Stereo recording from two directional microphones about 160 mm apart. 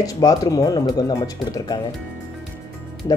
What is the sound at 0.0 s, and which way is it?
Speech, 20° left (ahead or behind).